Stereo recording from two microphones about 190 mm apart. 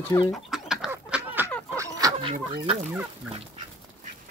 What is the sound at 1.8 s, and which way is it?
Chicken, 20° right (ahead or behind).